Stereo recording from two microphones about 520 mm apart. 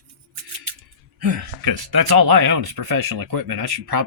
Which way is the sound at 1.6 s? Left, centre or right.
Right.